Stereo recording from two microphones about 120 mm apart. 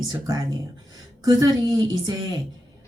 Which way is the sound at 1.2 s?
35° right (ahead or behind).